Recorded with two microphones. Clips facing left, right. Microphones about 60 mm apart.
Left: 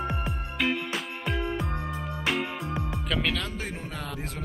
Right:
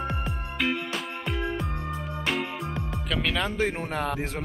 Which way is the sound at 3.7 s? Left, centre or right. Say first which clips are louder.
Right 7 dB; right.